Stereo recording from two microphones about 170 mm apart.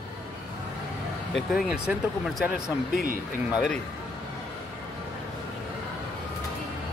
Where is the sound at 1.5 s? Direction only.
5° right (ahead or behind).